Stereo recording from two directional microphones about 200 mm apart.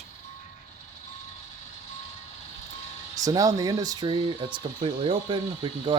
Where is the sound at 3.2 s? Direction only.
15° right (ahead or behind).